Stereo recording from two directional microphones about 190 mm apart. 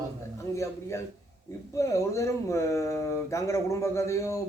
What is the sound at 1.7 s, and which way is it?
Speech, 15° left (ahead or behind).